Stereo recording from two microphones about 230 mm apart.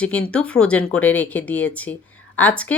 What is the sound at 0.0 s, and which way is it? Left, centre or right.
Speech, centre.